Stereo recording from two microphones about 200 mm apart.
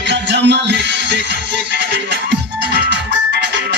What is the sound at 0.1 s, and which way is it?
Music, 60° right (ahead or behind).